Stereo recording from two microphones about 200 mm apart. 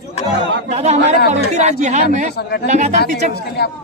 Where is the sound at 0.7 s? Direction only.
35° right (ahead or behind).